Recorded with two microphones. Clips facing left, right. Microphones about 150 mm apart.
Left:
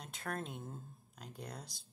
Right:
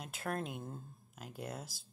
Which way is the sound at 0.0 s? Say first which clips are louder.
Right 3 dB; 5° right (ahead or behind).